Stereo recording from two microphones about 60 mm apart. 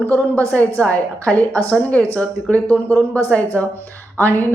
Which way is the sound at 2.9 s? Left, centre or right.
Right.